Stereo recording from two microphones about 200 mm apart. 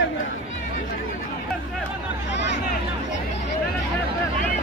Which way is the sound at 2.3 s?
60° left (ahead or behind).